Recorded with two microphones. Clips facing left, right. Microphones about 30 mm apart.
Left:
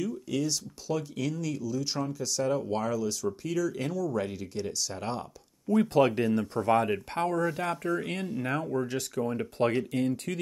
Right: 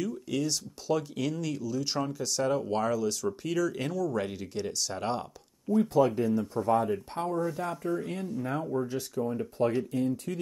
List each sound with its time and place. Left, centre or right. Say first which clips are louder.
0.0 s speech: even; centre
5.7 s speech: left 1 dB; left